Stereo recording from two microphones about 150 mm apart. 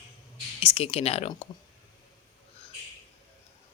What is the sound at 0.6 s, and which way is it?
Speech, 40° left (ahead or behind).